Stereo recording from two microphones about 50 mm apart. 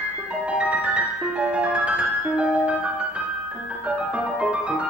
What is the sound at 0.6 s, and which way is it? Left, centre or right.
Music, right.